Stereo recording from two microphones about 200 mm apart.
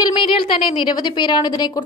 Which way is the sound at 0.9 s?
20° left (ahead or behind).